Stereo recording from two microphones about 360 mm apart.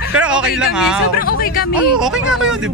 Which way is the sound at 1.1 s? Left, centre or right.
Left.